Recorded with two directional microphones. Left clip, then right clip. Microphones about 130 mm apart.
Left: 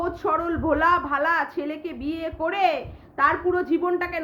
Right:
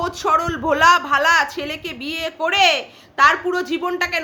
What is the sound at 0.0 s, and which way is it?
A man's voice, 20° right (ahead or behind).